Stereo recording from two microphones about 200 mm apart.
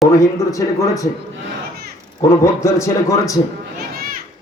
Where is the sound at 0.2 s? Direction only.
15° left (ahead or behind).